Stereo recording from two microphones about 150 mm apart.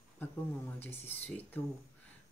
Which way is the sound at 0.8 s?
15° left (ahead or behind).